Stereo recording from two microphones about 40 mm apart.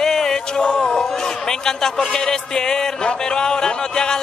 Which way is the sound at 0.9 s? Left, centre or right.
Centre.